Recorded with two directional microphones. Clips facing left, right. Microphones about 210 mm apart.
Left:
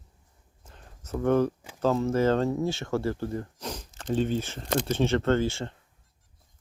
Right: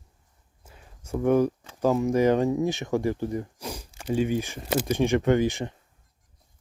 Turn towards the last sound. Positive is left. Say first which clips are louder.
# right 3 dB
turn(degrees=-15)  # may be behind; listen again after turning